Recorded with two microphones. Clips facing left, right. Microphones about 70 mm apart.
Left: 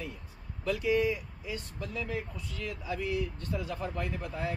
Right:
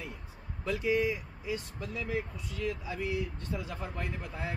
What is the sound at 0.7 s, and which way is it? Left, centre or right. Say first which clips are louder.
Speech: left 1 dB; right.